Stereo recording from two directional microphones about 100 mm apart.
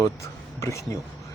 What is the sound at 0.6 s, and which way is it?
Speech, 30° left (ahead or behind).